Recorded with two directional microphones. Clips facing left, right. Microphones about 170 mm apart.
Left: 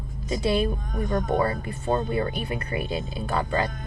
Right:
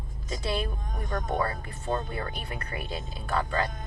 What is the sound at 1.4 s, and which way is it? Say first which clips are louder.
Speech: left 6 dB; 10° left (ahead or behind).